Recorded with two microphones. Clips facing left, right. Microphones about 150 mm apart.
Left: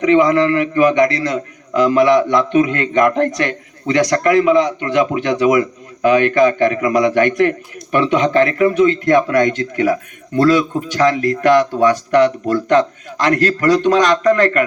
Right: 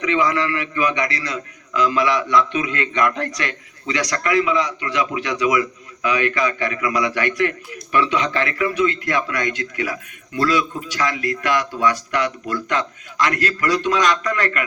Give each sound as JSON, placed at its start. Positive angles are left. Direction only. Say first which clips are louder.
{"t": 0.0, "sound": "a man's voice", "louder": "left 8 dB", "side_deg": 45}